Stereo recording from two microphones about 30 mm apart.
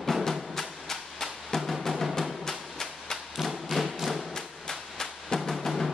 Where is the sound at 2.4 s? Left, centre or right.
Centre.